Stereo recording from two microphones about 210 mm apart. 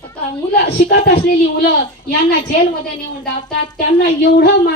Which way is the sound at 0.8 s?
50° left (ahead or behind).